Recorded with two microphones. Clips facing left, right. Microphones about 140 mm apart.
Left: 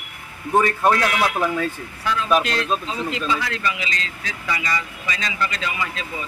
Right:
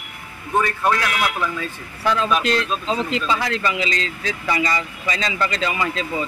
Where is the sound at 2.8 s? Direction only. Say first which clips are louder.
Right 3 dB; 30° right (ahead or behind).